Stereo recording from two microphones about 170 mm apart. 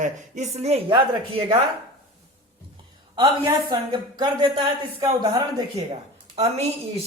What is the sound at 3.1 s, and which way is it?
A woman's voice, 30° right (ahead or behind).